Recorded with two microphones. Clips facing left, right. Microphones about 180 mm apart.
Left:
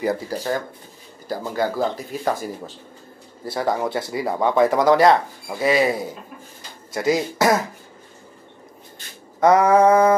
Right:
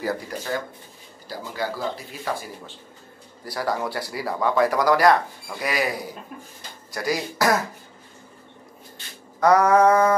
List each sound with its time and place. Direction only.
0.3 s speech: 35° left (ahead or behind)
1.3 s speech: 50° left (ahead or behind)
3.4 s speech: 20° left (ahead or behind)
9.4 s speech: 20° left (ahead or behind)